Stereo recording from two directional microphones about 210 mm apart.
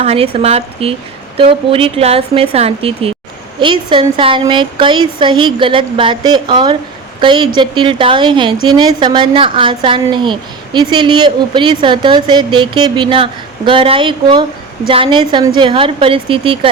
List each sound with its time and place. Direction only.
0.0 s a woman's voice: 30° right (ahead or behind)